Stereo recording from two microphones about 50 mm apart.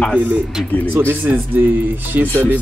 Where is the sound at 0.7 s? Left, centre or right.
Left.